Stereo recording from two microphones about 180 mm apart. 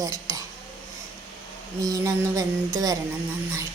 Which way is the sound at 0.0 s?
20° right (ahead or behind).